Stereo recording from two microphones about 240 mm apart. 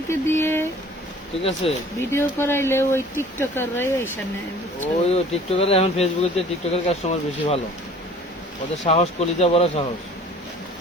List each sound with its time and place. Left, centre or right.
0.1 s speech: centre
1.4 s speech: left
2.0 s speech: centre
4.8 s speech: left
8.8 s speech: left